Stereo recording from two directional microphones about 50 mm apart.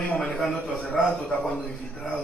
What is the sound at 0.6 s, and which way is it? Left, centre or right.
Speech, left.